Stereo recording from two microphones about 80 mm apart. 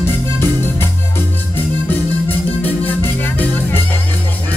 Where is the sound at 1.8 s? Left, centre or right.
Left.